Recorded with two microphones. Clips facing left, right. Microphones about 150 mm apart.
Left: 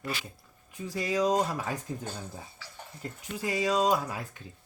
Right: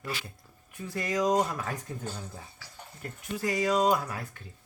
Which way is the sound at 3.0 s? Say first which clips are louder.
Right 2 dB; 15° left (ahead or behind).